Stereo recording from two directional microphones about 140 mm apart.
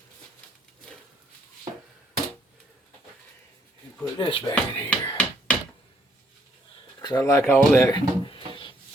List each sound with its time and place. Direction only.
4.2 s speech: 40° left (ahead or behind)
4.5 s speech: 10° left (ahead or behind)
7.0 s speech: 25° left (ahead or behind)